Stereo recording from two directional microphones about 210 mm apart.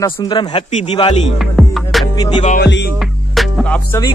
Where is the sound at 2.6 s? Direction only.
50° left (ahead or behind).